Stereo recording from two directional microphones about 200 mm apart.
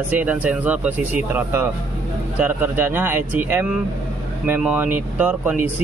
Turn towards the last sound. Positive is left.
turn(degrees=-10)  # may be behind; listen again after turning